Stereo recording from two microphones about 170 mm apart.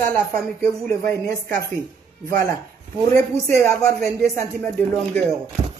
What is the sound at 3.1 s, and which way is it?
Speech, 15° left (ahead or behind).